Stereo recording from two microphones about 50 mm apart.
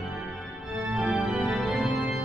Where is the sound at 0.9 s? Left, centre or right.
Centre.